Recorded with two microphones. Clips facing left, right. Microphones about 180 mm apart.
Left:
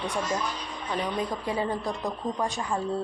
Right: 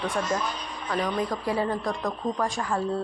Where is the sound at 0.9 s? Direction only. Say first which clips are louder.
Right 2 dB; 25° left (ahead or behind).